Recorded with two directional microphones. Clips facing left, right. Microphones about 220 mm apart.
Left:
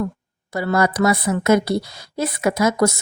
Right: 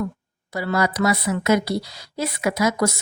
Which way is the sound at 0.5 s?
50° left (ahead or behind).